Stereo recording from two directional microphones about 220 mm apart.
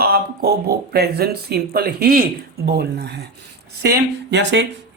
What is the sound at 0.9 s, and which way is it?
Speech, 45° right (ahead or behind).